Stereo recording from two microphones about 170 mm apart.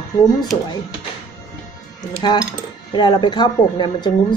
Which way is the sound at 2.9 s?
25° left (ahead or behind).